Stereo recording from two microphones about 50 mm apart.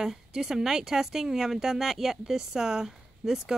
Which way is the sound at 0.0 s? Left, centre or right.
Centre.